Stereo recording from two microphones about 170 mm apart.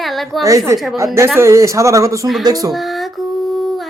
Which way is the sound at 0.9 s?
15° right (ahead or behind).